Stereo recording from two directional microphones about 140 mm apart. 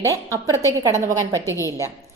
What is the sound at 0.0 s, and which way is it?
A woman's voice, 20° right (ahead or behind).